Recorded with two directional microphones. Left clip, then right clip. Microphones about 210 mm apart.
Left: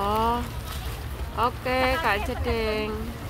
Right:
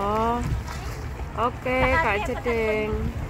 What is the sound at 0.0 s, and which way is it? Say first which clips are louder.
Boat: even; 5° left (ahead or behind).